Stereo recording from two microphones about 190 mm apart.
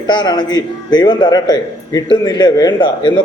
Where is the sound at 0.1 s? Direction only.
25° left (ahead or behind).